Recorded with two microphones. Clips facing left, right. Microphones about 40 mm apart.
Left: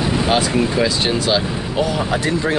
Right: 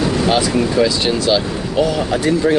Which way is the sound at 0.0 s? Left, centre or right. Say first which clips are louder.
Right 2 dB; centre.